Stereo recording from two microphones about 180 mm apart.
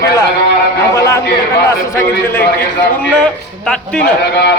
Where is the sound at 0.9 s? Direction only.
15° left (ahead or behind).